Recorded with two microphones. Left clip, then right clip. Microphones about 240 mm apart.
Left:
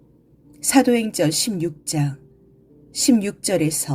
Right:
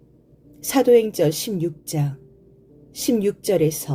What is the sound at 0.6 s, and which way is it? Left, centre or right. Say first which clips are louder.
A woman's voice: right 3 dB; left.